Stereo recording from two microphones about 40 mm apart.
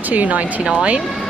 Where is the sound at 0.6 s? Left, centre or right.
Right.